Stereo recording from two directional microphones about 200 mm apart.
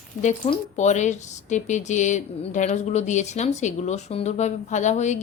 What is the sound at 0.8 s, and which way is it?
Speech, 35° left (ahead or behind).